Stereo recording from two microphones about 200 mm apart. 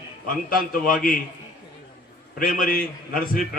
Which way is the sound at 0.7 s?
45° left (ahead or behind).